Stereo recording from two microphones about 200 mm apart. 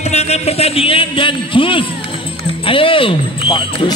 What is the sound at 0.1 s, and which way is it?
A man's voice, 30° left (ahead or behind).